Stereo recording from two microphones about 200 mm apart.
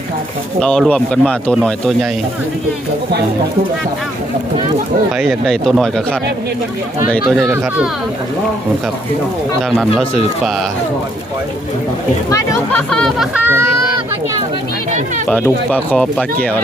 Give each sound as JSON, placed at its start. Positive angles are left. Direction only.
{"t": 0.6, "sound": "speech", "side_deg": 5}
{"t": 5.1, "sound": "speech", "side_deg": 0}
{"t": 12.3, "sound": "speech", "side_deg": 15}
{"t": 12.9, "sound": "speech", "side_deg": 0}
{"t": 15.3, "sound": "speech", "side_deg": 10}